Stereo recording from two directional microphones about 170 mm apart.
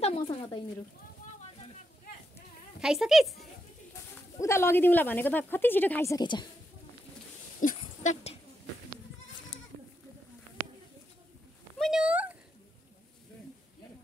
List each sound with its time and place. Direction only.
0.0 s speech: 35° left (ahead or behind)
2.8 s a woman's voice: centre (ahead or behind)
4.4 s a woman's voice: 15° left (ahead or behind)
7.6 s a sound: 45° left (ahead or behind)
9.5 s goat: 25° left (ahead or behind)
11.8 s a sound: 5° right (ahead or behind)